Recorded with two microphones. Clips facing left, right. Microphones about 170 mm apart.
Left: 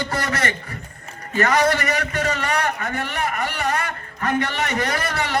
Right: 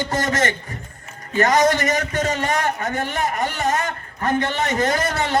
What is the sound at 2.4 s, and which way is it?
A man's voice, 35° right (ahead or behind).